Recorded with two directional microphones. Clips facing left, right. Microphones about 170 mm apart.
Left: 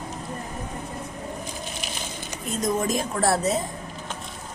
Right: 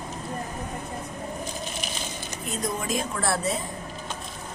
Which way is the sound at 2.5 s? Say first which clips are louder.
Left 4 dB; 45° left (ahead or behind).